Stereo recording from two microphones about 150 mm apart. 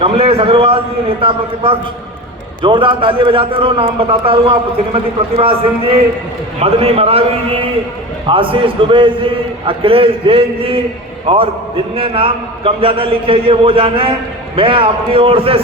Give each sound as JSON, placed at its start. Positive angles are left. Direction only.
{"t": 0.0, "sound": "a man's voice", "side_deg": -40}
{"t": 6.6, "sound": "a man's voice", "side_deg": -40}